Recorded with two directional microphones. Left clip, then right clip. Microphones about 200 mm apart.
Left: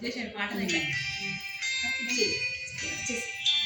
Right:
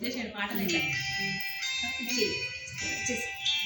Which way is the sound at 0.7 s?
35° left (ahead or behind).